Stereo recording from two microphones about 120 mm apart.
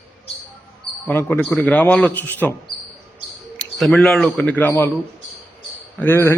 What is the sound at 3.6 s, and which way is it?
Speech, centre (ahead or behind).